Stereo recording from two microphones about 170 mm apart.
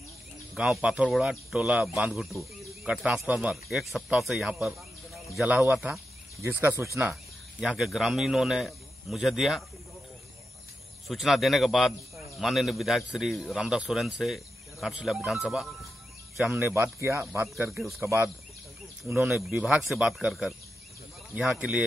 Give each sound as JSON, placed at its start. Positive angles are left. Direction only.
{"t": 0.6, "sound": "speech", "side_deg": -5}
{"t": 7.6, "sound": "speech", "side_deg": 0}
{"t": 11.1, "sound": "speech", "side_deg": 0}
{"t": 17.6, "sound": "speech", "side_deg": 0}
{"t": 18.0, "sound": "speech", "side_deg": -15}